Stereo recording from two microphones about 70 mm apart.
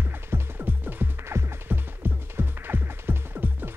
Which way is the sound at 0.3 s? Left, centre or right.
Right.